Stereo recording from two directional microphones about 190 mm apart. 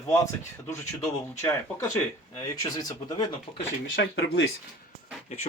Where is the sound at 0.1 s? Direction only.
15° left (ahead or behind).